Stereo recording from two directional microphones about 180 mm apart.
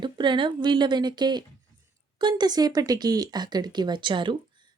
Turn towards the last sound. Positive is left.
turn(degrees=-25)  # may be behind; listen again after turning